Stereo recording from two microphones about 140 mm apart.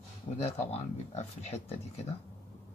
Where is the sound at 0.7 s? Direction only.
50° left (ahead or behind).